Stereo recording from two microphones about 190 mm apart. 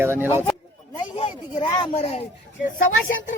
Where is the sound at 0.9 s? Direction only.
25° left (ahead or behind).